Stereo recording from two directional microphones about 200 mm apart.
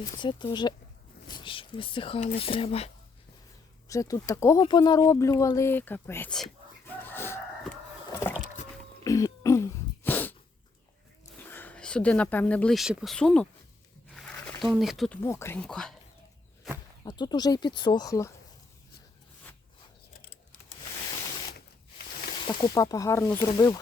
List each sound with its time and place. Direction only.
0.2 s speech: 25° left (ahead or behind)
3.8 s speech: 15° left (ahead or behind)
7.0 s chicken: 10° left (ahead or behind)
9.0 s throat clearing: 15° left (ahead or behind)
11.3 s speech: 10° left (ahead or behind)
14.2 s a sound: 5° left (ahead or behind)
15.2 s speech: 15° left (ahead or behind)
17.1 s speech: 20° left (ahead or behind)
22.4 s speech: 20° left (ahead or behind)